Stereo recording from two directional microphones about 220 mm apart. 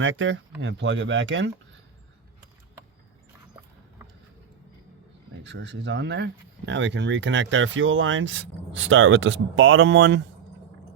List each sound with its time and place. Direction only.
0.0 s speech: 60° right (ahead or behind)
5.4 s speech: 55° right (ahead or behind)